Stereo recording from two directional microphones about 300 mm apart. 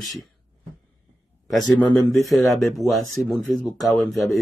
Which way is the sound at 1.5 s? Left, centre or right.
Centre.